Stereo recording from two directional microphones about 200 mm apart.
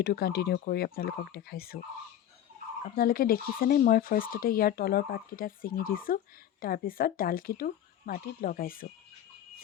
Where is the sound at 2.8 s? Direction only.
45° left (ahead or behind).